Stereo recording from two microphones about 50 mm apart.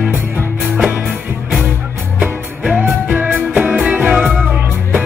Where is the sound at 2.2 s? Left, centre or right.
Centre.